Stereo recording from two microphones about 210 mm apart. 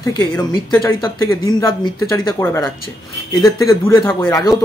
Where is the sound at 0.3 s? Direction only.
15° left (ahead or behind).